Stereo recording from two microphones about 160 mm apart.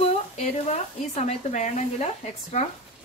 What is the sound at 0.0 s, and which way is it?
Speech, 45° left (ahead or behind).